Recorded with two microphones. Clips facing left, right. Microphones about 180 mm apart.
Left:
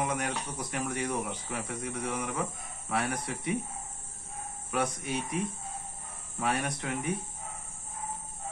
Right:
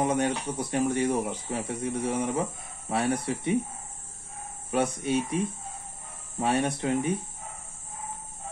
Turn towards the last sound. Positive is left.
turn(degrees=-30)  # may be behind; listen again after turning